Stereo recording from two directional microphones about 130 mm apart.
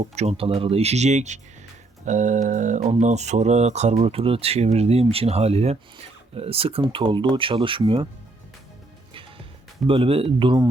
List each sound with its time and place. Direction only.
0.0 s speech: 55° right (ahead or behind)
2.0 s a sound: 70° right (ahead or behind)
3.0 s speech: 60° right (ahead or behind); by 8.0 s 40° right (ahead or behind)
9.8 s speech: 45° right (ahead or behind)